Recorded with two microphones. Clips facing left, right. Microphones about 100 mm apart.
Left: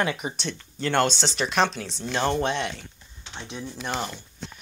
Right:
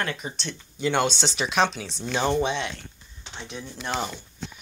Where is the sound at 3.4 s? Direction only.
15° left (ahead or behind).